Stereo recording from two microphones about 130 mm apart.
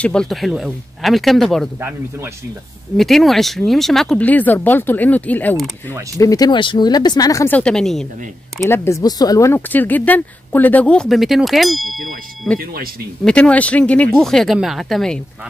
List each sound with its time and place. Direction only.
0.0 s speech: 5° left (ahead or behind)
1.8 s speech: 20° right (ahead or behind)
3.0 s speech: centre (ahead or behind)
6.1 s speech: 25° left (ahead or behind)
7.4 s speech: 10° left (ahead or behind)
8.6 s speech: 20° left (ahead or behind); by 12.1 s centre (ahead or behind)
13.2 s speech: 10° left (ahead or behind)